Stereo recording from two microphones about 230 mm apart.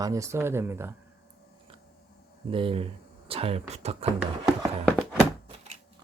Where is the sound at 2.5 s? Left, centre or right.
Right.